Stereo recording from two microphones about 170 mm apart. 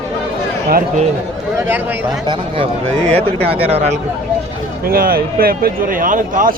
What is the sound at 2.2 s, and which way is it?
A man's voice, 35° right (ahead or behind).